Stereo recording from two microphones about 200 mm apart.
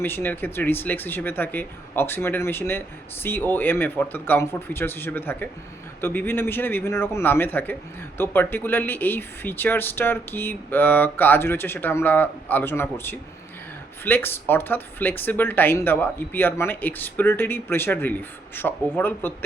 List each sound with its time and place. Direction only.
0.0 s speech: 10° left (ahead or behind)